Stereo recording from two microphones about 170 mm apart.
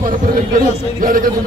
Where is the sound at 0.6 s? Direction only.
55° right (ahead or behind).